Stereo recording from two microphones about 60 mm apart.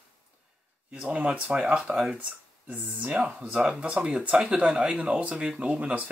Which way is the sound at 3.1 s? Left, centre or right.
Centre.